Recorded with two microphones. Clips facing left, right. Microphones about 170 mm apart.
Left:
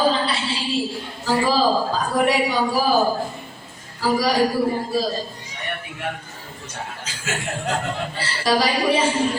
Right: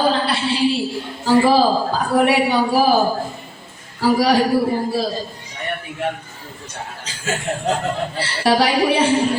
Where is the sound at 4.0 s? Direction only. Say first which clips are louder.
Right 5 dB; 65° right (ahead or behind).